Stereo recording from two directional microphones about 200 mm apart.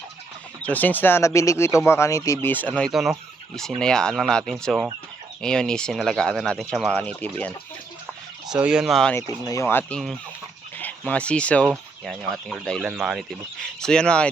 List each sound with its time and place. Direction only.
0.6 s speech: 10° left (ahead or behind)
8.4 s speech: 5° right (ahead or behind)
9.1 s speech: 15° left (ahead or behind)